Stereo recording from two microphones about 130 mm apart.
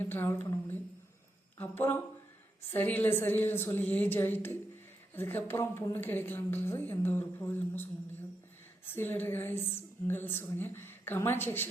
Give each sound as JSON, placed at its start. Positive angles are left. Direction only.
{"t": 0.0, "sound": "a woman's voice", "side_deg": 15}
{"t": 8.9, "sound": "a woman's voice", "side_deg": 15}